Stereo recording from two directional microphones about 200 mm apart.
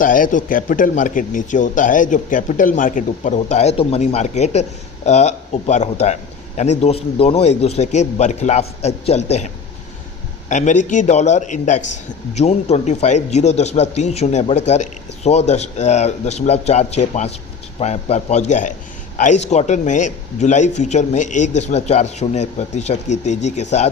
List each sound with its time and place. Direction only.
0.0 s speech: 40° left (ahead or behind)
10.5 s speech: 40° left (ahead or behind)